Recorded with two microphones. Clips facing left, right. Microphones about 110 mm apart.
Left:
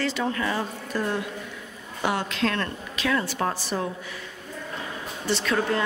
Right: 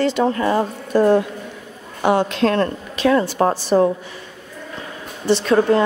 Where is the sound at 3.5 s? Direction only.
40° right (ahead or behind).